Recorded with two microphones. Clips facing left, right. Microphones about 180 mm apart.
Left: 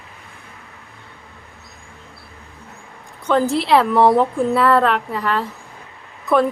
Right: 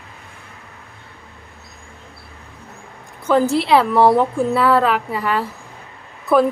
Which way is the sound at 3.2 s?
5° right (ahead or behind).